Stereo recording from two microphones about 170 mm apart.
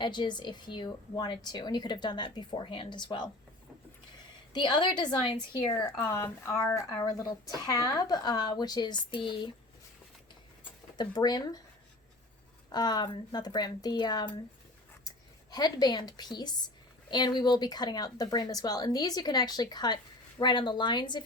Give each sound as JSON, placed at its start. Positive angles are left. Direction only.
{"t": 0.0, "sound": "a woman's voice", "side_deg": 25}
{"t": 4.5, "sound": "a woman's voice", "side_deg": 25}
{"t": 5.7, "sound": "a woman's voice", "side_deg": 15}
{"t": 10.9, "sound": "a woman's voice", "side_deg": 25}
{"t": 12.7, "sound": "a woman's voice", "side_deg": 25}